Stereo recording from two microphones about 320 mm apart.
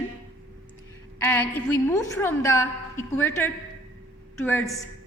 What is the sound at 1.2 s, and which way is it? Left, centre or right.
A woman's voice, centre.